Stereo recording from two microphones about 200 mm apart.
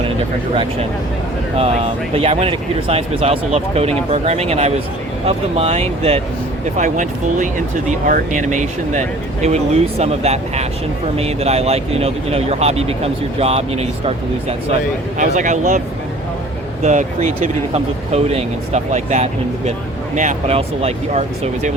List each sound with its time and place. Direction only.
1.5 s speech: 30° right (ahead or behind)
15.2 s speech: 40° right (ahead or behind)
16.8 s speech: 35° right (ahead or behind)